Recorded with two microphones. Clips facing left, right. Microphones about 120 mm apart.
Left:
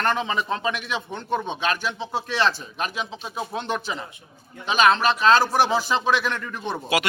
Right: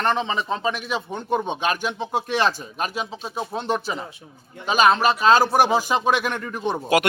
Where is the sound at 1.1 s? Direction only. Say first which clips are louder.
Right 3 dB; 10° right (ahead or behind).